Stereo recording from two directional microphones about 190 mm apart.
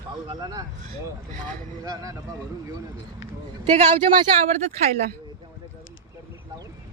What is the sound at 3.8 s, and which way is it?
Speech, 30° right (ahead or behind).